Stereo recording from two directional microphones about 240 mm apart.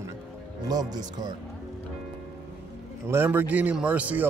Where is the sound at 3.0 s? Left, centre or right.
Centre.